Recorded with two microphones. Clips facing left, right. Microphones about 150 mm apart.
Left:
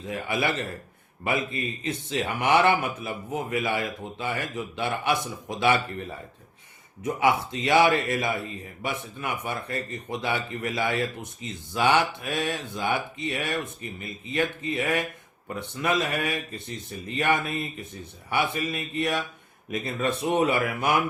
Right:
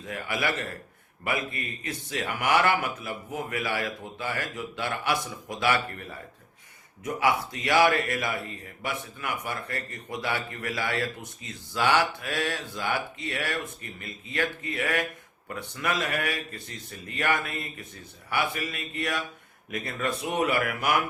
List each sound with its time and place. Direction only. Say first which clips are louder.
0.0 s a man's voice: left 3 dB; 25° left (ahead or behind)
7.0 s a man's voice: left 2 dB; 25° left (ahead or behind)